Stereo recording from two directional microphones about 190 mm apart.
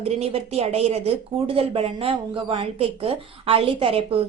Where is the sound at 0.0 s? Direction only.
35° right (ahead or behind).